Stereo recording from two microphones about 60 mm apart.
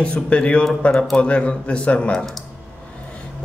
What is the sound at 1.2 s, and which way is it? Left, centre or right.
A man's voice, centre.